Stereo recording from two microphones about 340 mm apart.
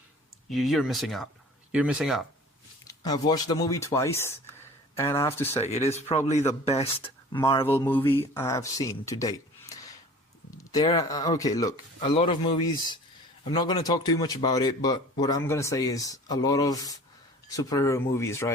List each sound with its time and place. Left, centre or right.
0.5 s speech: centre
2.8 s speech: centre
5.5 s speech: centre
13.4 s speech: centre